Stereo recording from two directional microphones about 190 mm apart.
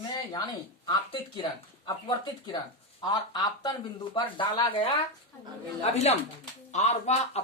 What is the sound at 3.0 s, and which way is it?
Speech, 20° left (ahead or behind).